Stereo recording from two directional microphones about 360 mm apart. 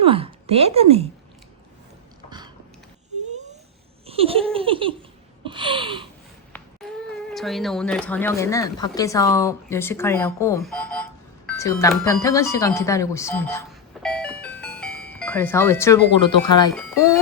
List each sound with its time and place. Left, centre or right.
0.0 s a woman's voice: centre
4.0 s a sound: centre
4.5 s laughter: centre
5.5 s a sound: centre
7.3 s speech: centre
14.0 s music: centre
16.2 s speech: centre